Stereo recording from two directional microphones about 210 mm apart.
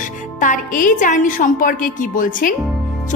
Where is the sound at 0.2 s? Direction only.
40° left (ahead or behind).